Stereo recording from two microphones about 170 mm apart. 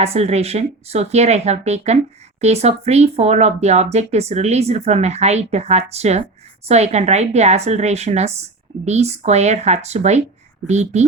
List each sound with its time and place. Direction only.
0.0 s speech: 40° right (ahead or behind)